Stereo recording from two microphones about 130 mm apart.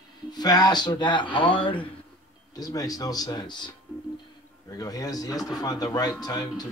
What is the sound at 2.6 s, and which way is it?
Speech, 30° left (ahead or behind).